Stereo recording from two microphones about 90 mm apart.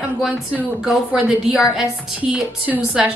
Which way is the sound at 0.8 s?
Centre (ahead or behind).